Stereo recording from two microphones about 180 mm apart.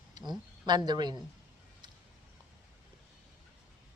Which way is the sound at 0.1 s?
25° right (ahead or behind).